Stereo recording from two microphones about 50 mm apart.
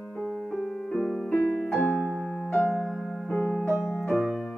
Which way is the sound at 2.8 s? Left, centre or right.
Centre.